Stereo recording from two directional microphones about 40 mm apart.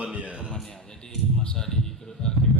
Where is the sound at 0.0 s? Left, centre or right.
Right.